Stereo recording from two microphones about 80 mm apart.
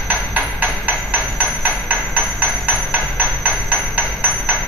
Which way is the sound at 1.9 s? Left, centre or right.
Right.